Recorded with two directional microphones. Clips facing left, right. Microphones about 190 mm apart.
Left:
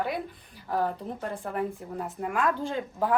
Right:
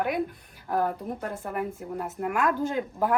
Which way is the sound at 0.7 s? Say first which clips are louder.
Right 2 dB; 5° right (ahead or behind).